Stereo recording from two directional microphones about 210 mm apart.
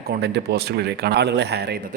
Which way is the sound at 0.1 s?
50° right (ahead or behind).